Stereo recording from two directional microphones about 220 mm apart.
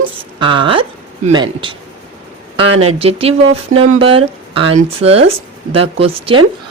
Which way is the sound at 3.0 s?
25° right (ahead or behind).